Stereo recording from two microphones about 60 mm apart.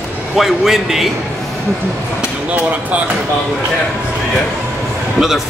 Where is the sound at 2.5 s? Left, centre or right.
Right.